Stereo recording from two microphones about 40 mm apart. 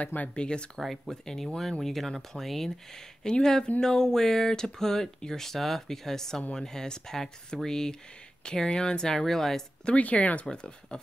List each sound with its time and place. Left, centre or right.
0.0 s speech: left
0.3 s speech: left
0.7 s speech: centre
1.2 s speech: centre
3.3 s speech: centre
9.2 s speech: centre
9.8 s speech: left
10.5 s speech: centre